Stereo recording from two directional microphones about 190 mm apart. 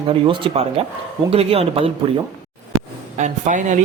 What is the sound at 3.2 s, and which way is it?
Speech, 40° right (ahead or behind).